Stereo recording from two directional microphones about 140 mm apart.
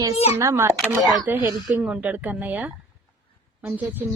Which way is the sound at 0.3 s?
20° right (ahead or behind).